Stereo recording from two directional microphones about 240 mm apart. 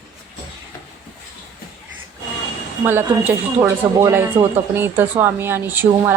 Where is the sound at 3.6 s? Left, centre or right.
Centre.